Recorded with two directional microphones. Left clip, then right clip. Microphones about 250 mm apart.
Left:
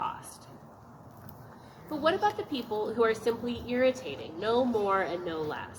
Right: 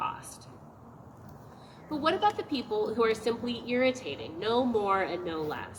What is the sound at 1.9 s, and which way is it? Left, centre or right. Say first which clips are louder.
A woman's voice: even; right.